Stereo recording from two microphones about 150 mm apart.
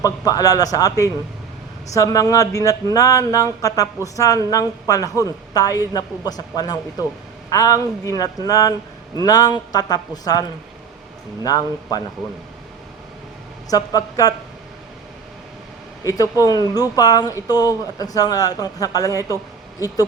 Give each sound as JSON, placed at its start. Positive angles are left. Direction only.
{"t": 0.0, "sound": "speech", "side_deg": 25}
{"t": 11.4, "sound": "speech", "side_deg": 25}
{"t": 13.7, "sound": "speech", "side_deg": 25}
{"t": 16.0, "sound": "speech", "side_deg": 25}